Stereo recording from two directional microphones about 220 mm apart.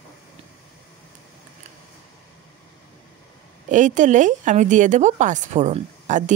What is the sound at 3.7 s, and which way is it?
A woman's voice, 35° right (ahead or behind).